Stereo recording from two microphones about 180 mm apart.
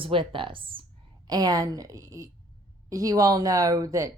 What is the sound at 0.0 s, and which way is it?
A woman's voice, 30° right (ahead or behind).